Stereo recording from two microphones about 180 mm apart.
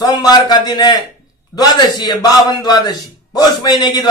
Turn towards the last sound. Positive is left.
turn(degrees=20)  # may be behind; listen again after turning